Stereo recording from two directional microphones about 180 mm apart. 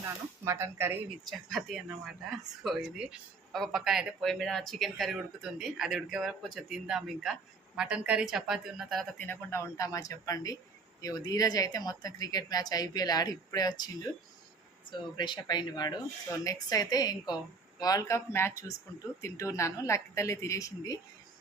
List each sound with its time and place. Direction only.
0.4 s speech: 15° right (ahead or behind)
1.3 s a woman's voice: centre (ahead or behind); by 13.9 s 20° left (ahead or behind)
15.2 s a woman's voice: 25° left (ahead or behind)